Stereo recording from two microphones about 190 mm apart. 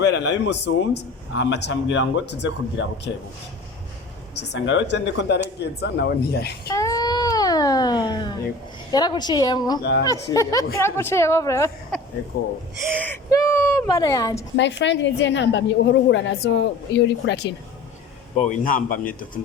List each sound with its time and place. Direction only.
0.0 s a woman's voice: 65° left (ahead or behind)
4.4 s speech: 65° left (ahead or behind)
6.7 s a sound: 15° left (ahead or behind)
8.9 s a woman's voice: 20° left (ahead or behind)
11.9 s a sound: 5° left (ahead or behind)
12.3 s speech: 55° left (ahead or behind)
13.0 s speech: 15° left (ahead or behind)
14.5 s a woman's voice: 70° left (ahead or behind)
18.3 s a man's voice: 45° left (ahead or behind)